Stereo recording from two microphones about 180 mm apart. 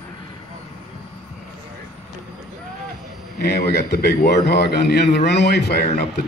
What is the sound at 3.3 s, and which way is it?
A man's voice, 65° left (ahead or behind).